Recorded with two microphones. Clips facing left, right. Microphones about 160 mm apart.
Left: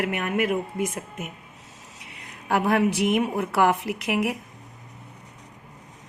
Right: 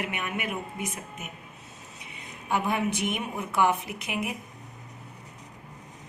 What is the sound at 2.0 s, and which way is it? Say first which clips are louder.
A woman's voice: even; 90° left.